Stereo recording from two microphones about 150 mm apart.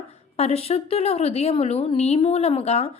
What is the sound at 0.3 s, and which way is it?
A woman's voice, 45° left (ahead or behind).